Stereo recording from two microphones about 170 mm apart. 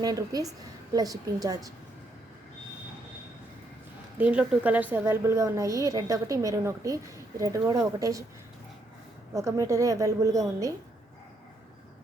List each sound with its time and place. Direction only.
0.0 s a woman's voice: 20° right (ahead or behind)
4.2 s a woman's voice: 10° right (ahead or behind)
9.3 s a woman's voice: 20° right (ahead or behind)